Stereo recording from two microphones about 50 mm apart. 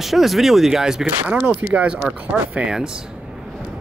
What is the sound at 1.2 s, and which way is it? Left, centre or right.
Speech, right.